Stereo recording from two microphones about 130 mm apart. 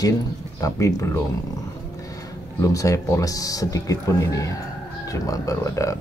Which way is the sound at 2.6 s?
25° left (ahead or behind).